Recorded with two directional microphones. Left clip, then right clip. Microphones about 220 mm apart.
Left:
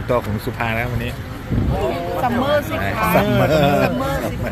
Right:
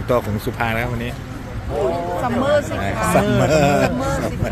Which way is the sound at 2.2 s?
Centre (ahead or behind).